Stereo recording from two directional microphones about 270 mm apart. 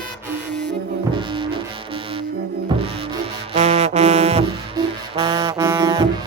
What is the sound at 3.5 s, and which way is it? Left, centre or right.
Brass instrument, right.